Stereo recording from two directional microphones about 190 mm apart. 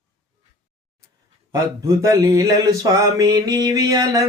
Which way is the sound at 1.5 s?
15° right (ahead or behind).